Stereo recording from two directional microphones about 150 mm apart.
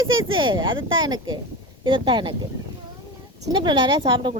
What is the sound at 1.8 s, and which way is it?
Speech, 35° right (ahead or behind).